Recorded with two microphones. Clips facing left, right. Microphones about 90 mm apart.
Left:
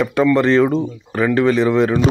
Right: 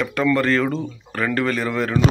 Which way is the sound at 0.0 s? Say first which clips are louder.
Left 5 dB; 20° left (ahead or behind).